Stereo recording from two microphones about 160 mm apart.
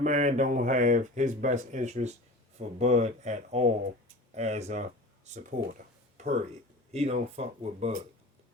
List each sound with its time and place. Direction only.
0.0 s speech: 50° right (ahead or behind)